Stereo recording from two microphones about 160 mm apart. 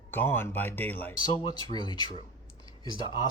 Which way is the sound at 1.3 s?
30° left (ahead or behind).